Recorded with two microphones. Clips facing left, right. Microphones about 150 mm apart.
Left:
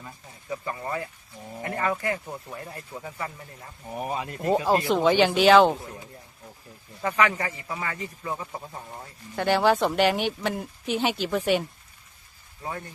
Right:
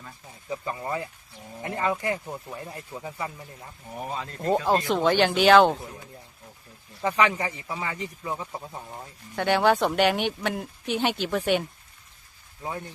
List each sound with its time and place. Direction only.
0.5 s speech: 20° right (ahead or behind)
2.2 s a man's voice: 5° right (ahead or behind)
3.9 s speech: 15° left (ahead or behind)
5.0 s speech: 5° left (ahead or behind)
7.1 s a man's voice: 15° right (ahead or behind)
8.5 s speech: centre (ahead or behind)